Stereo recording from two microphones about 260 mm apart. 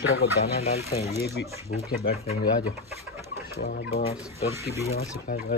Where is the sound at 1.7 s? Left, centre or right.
Left.